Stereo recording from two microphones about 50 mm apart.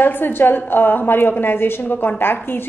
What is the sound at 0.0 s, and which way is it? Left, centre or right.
A woman's voice, left.